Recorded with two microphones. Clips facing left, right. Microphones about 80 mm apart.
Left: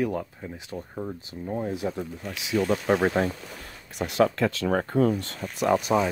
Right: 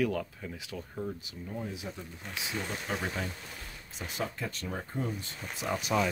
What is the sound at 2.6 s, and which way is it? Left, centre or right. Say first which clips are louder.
Speech: left 15 dB; left.